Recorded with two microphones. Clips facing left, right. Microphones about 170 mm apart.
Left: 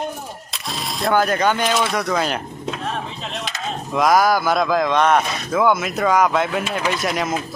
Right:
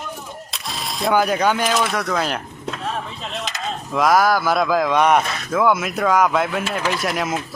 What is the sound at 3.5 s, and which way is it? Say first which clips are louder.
Speech: left 2 dB; centre (ahead or behind).